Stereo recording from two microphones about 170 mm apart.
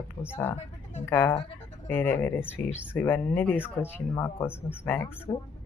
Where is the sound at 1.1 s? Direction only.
10° left (ahead or behind).